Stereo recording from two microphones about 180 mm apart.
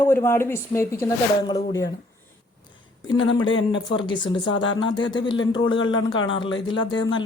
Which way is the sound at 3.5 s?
90° left.